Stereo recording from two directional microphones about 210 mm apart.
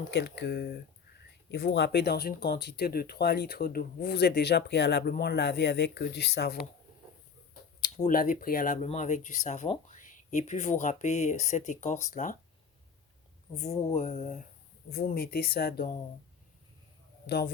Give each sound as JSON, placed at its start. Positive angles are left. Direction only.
{"t": 0.1, "sound": "speech", "side_deg": 55}
{"t": 7.8, "sound": "speech", "side_deg": 40}
{"t": 13.6, "sound": "speech", "side_deg": 30}
{"t": 14.8, "sound": "speech", "side_deg": 45}
{"t": 17.2, "sound": "a man's voice", "side_deg": 50}